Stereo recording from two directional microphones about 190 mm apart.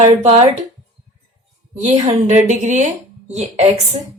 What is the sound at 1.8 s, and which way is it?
A woman's voice, 40° right (ahead or behind).